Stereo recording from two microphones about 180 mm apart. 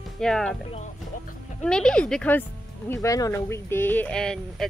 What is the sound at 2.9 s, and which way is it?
Speech, 15° left (ahead or behind).